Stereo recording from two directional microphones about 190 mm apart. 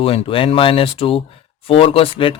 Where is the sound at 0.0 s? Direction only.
30° left (ahead or behind).